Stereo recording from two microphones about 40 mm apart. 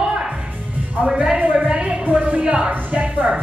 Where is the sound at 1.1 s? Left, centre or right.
Right.